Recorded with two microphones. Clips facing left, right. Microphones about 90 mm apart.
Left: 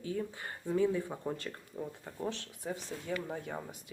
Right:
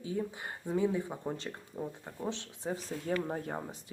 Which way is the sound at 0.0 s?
25° right (ahead or behind).